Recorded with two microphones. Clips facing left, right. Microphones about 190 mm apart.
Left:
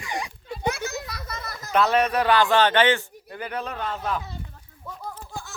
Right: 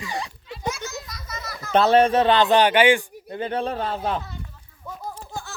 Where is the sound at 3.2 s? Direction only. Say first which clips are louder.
Right 6 dB; 25° right (ahead or behind).